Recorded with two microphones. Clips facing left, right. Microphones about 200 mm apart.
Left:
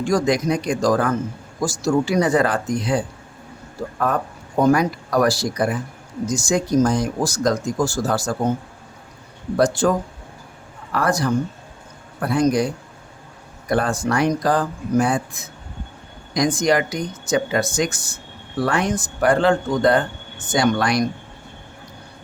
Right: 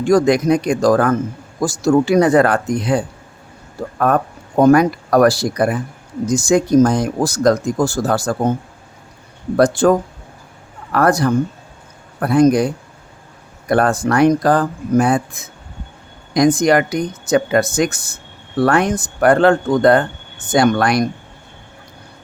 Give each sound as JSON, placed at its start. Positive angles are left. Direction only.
{"t": 0.1, "sound": "speech", "side_deg": -55}
{"t": 9.6, "sound": "speech", "side_deg": -60}
{"t": 10.9, "sound": "speech", "side_deg": -55}
{"t": 13.7, "sound": "speech", "side_deg": -60}